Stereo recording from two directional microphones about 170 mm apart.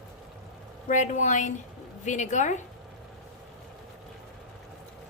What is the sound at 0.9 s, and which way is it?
A woman's voice, 45° left (ahead or behind).